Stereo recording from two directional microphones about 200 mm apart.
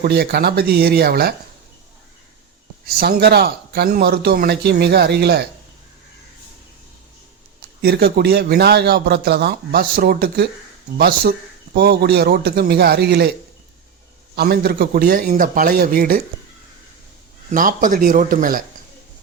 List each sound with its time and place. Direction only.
0.0 s a man's voice: 50° right (ahead or behind)
3.0 s a man's voice: 50° right (ahead or behind)
7.8 s a man's voice: 50° right (ahead or behind)
14.3 s a man's voice: 50° right (ahead or behind)
17.5 s a man's voice: 40° right (ahead or behind)